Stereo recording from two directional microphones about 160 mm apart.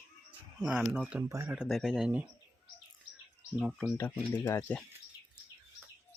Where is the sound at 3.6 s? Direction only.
5° right (ahead or behind).